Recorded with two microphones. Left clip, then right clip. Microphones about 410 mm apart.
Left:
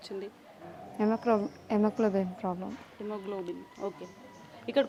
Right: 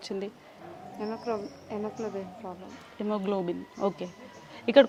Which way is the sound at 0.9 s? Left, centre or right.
Left.